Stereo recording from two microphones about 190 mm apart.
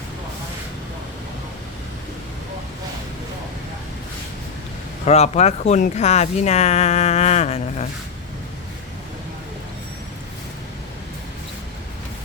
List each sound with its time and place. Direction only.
5.0 s speech: 35° left (ahead or behind)